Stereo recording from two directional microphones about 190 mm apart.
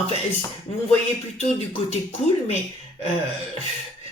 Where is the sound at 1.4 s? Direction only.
35° left (ahead or behind).